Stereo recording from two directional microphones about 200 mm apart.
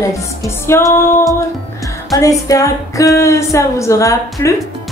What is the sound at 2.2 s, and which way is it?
Speech, 15° left (ahead or behind).